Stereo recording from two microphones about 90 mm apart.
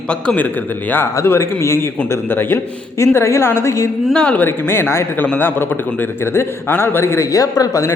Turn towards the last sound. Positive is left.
turn(degrees=40)  # may be behind; listen again after turning